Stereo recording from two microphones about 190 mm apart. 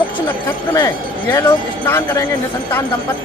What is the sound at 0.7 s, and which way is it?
Speech, 15° left (ahead or behind).